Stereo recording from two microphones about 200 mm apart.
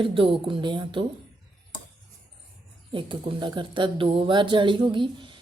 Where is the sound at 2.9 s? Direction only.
25° right (ahead or behind).